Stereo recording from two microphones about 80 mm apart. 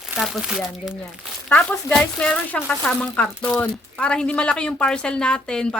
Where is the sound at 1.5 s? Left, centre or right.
Centre.